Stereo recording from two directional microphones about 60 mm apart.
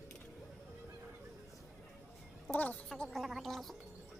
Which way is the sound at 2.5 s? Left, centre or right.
Left.